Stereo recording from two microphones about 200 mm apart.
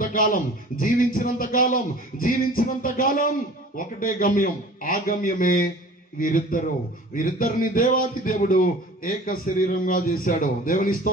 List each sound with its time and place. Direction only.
0.0 s speech: 45° left (ahead or behind)